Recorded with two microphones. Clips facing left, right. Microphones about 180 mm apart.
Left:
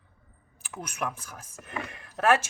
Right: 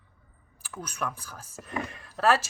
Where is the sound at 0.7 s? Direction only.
20° left (ahead or behind).